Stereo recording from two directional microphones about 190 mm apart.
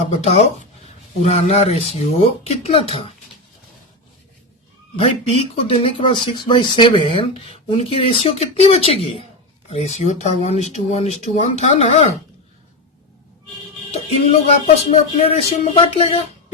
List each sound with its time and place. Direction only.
0.2 s speech: 35° left (ahead or behind)
4.9 s speech: 30° left (ahead or behind)
13.9 s music: 35° left (ahead or behind)
14.8 s speech: 35° left (ahead or behind)